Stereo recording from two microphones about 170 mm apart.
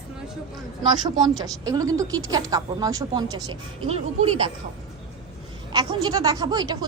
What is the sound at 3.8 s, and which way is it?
Speech, 35° right (ahead or behind).